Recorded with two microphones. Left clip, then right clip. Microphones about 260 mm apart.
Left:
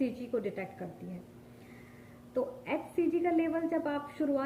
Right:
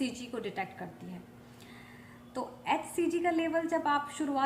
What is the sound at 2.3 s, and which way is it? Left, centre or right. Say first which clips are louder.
A woman's voice: right 1 dB; centre.